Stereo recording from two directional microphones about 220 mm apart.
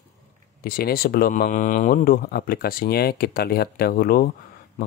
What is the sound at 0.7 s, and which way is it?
Speech, 45° left (ahead or behind).